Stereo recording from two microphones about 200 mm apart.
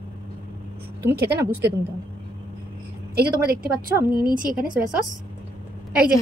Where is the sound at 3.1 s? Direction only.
50° right (ahead or behind).